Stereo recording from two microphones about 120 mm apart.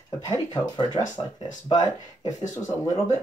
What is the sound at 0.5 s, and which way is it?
Speech, 35° left (ahead or behind).